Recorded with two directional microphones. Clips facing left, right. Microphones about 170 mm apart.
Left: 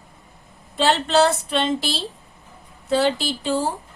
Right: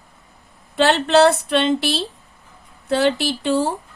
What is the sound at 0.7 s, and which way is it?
A woman's voice, 65° right (ahead or behind).